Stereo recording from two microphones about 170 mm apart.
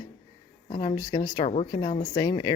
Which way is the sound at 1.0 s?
20° left (ahead or behind).